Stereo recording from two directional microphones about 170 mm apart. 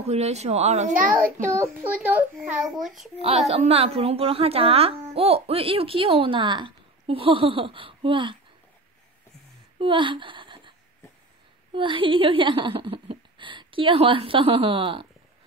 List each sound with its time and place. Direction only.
0.0 s speech: 40° right (ahead or behind); by 1.3 s 55° right (ahead or behind)
1.4 s a child's voice: 15° right (ahead or behind)
3.2 s speech: 35° right (ahead or behind)
9.8 s a sound: 30° right (ahead or behind)
11.7 s a woman's voice: 30° right (ahead or behind)